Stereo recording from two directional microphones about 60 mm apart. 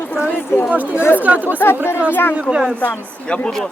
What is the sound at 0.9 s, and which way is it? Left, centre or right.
Speech, left.